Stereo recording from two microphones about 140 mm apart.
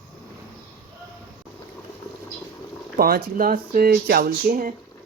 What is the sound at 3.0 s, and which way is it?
Speech, 90° right.